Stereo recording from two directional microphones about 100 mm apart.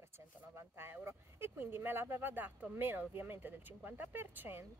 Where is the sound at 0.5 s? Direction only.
25° right (ahead or behind).